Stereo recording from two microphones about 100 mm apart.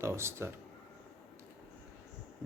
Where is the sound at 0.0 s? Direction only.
25° right (ahead or behind).